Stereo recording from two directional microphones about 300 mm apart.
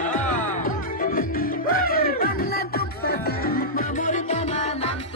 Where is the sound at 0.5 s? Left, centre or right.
Left.